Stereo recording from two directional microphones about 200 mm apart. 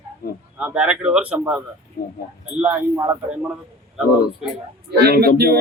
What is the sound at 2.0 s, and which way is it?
Speech, 50° left (ahead or behind).